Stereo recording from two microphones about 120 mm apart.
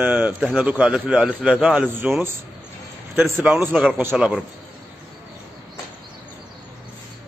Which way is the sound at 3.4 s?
15° right (ahead or behind).